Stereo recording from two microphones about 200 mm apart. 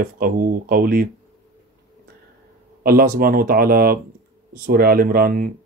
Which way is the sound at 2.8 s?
45° right (ahead or behind).